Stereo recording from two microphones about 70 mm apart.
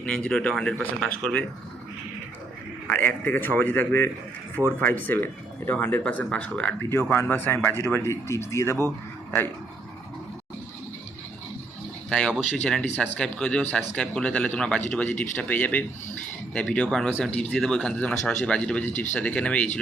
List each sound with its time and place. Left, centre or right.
0.0 s speech: centre
2.8 s a man's voice: left
7.1 s speech: left
12.0 s speech: centre